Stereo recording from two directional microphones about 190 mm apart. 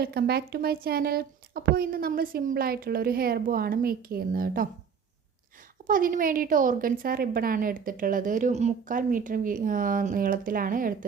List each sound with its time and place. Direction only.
0.0 s a woman's voice: 55° right (ahead or behind)
5.9 s a woman's voice: 45° right (ahead or behind)